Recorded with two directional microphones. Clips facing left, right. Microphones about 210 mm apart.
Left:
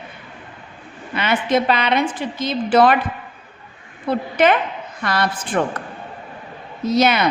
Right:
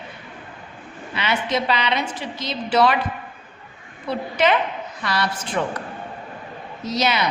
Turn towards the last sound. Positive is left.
turn(degrees=50)  # may be behind; listen again after turning